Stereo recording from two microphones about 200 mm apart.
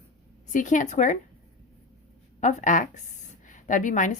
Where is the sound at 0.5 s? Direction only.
40° left (ahead or behind).